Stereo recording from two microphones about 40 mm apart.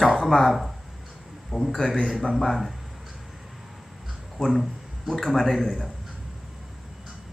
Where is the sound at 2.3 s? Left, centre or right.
Centre.